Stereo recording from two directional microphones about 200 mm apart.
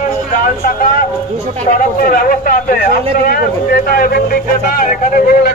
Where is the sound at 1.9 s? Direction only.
45° left (ahead or behind).